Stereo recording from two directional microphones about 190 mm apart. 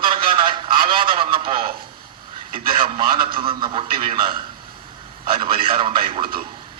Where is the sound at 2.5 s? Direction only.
25° right (ahead or behind).